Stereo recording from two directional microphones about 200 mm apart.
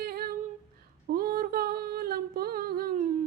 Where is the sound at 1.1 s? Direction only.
50° right (ahead or behind).